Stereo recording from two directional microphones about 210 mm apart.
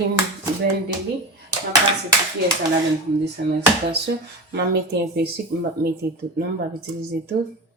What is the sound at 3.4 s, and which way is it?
Speech, 55° right (ahead or behind).